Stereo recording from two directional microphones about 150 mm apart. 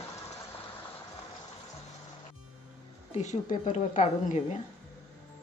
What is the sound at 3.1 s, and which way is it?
A woman's voice, 50° left (ahead or behind).